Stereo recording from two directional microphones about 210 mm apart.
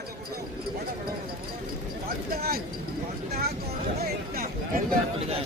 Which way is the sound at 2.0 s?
45° right (ahead or behind).